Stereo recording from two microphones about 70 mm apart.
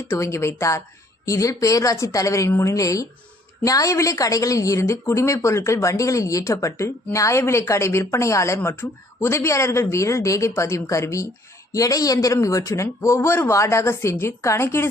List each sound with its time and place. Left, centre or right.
0.1 s a woman's voice: left